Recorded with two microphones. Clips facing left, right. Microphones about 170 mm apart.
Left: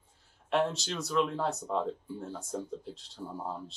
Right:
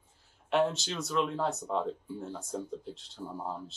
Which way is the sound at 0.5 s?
Centre (ahead or behind).